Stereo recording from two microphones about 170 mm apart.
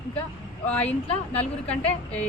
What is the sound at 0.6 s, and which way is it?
A woman's voice, 10° left (ahead or behind).